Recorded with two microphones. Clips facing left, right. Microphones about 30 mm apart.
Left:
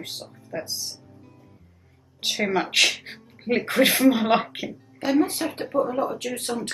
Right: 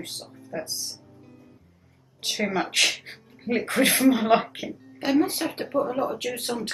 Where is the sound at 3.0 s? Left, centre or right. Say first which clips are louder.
Left 2 dB; left.